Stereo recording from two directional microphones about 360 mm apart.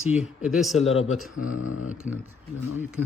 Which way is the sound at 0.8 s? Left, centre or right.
Centre.